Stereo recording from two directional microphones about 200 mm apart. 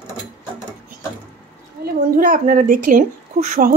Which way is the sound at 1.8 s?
45° right (ahead or behind).